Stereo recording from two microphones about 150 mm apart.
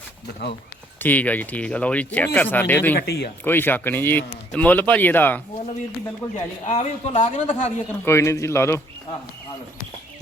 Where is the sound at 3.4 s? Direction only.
15° left (ahead or behind).